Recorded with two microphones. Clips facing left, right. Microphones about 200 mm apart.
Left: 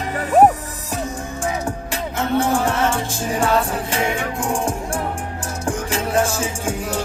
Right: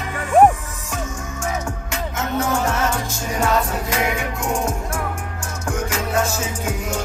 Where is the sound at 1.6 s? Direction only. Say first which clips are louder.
Left 2 dB; 35° left (ahead or behind).